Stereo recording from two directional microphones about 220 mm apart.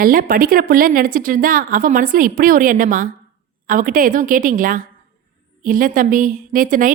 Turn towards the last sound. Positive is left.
turn(degrees=-40)  # may be behind; listen again after turning